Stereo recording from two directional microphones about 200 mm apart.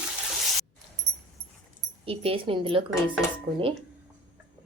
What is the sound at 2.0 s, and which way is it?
A woman's voice, 30° right (ahead or behind).